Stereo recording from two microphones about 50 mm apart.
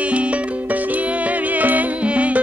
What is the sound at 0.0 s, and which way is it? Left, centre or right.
Music, right.